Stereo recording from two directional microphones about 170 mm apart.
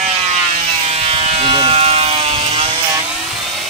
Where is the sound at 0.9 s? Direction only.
35° right (ahead or behind).